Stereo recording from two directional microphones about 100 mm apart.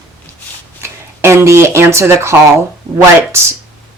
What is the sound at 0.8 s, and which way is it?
Speech, 25° right (ahead or behind).